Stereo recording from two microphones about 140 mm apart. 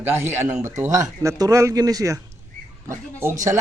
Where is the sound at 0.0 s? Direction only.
15° right (ahead or behind).